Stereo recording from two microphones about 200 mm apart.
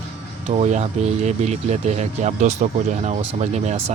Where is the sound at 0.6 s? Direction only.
35° right (ahead or behind).